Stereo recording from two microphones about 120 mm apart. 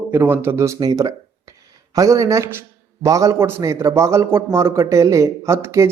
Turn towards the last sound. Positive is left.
turn(degrees=-20)  # may be behind; listen again after turning